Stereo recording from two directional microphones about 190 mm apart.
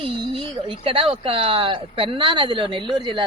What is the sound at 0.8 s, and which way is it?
Speech, 30° right (ahead or behind).